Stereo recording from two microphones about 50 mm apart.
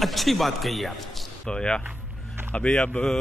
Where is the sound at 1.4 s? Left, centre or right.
Centre.